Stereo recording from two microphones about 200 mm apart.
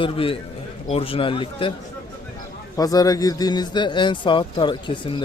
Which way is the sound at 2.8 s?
20° left (ahead or behind).